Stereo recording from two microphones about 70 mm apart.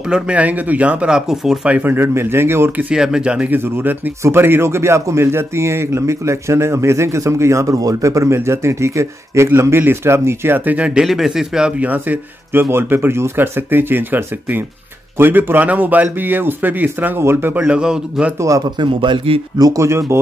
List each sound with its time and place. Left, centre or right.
0.1 s speech: centre
1.7 s speech: right
2.9 s speech: centre
3.5 s speech: right
10.9 s speech: centre
11.8 s speech: right
17.6 s speech: centre
19.6 s speech: right